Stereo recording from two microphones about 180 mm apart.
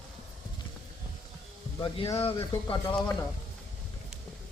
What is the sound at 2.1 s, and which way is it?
Speech, 30° left (ahead or behind).